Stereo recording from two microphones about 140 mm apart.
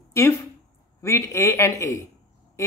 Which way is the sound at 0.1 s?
20° left (ahead or behind).